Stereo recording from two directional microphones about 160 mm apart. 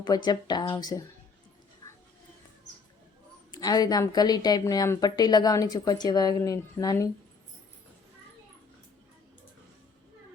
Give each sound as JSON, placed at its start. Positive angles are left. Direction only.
{"t": 0.0, "sound": "a woman's voice", "side_deg": 25}
{"t": 3.5, "sound": "a woman's voice", "side_deg": 25}